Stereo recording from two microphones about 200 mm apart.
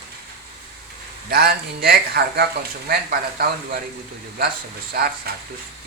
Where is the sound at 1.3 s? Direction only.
50° right (ahead or behind).